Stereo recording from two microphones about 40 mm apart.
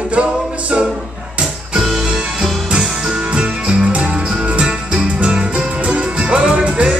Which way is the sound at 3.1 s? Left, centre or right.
Right.